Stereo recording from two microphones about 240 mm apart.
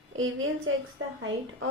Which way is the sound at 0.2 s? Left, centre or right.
Right.